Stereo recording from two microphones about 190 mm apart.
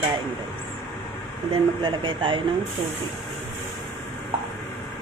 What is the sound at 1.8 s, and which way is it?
Speech, 25° right (ahead or behind).